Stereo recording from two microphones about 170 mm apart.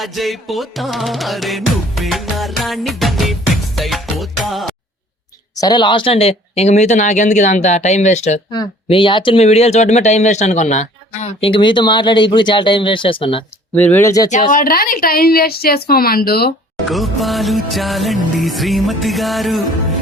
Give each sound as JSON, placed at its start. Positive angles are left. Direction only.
{"t": 0.0, "sound": "music", "side_deg": 0}
{"t": 5.5, "sound": "speech", "side_deg": 25}
{"t": 8.5, "sound": "speech", "side_deg": 30}
{"t": 13.7, "sound": "speech", "side_deg": 10}
{"t": 14.5, "sound": "a woman's voice", "side_deg": 60}
{"t": 16.9, "sound": "music", "side_deg": 0}